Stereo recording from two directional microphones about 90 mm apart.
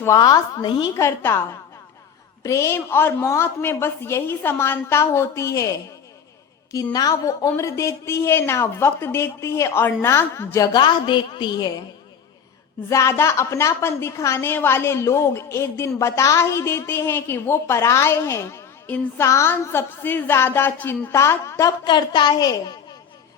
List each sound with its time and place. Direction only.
0.2 s a woman's voice: 45° left (ahead or behind)
0.6 s a woman's voice: 60° left (ahead or behind)
0.9 s a woman's voice: 30° left (ahead or behind)
2.4 s a woman's voice: 35° left (ahead or behind)
6.9 s a woman's voice: 40° left (ahead or behind)
10.6 s a woman's voice: 55° left (ahead or behind)
12.9 s a woman's voice: 30° left (ahead or behind)
21.1 s a woman's voice: 30° left (ahead or behind)
21.8 s a woman's voice: 55° left (ahead or behind)